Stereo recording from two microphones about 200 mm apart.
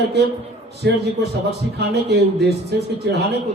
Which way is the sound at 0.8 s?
60° right (ahead or behind).